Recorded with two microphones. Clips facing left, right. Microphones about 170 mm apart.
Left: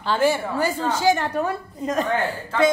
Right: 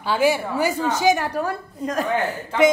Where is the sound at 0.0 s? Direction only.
10° right (ahead or behind).